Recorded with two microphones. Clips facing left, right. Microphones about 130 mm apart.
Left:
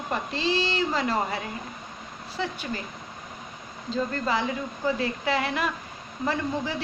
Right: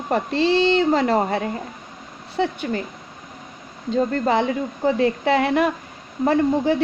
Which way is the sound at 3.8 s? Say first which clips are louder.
Right 7 dB; 55° right (ahead or behind).